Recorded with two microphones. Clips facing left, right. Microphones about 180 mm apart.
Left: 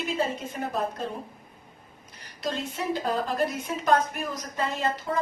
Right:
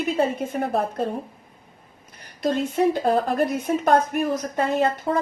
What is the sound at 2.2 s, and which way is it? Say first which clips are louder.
Speech: right 8 dB; 50° right (ahead or behind).